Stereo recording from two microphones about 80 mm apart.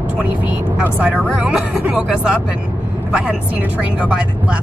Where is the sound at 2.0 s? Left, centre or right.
Centre.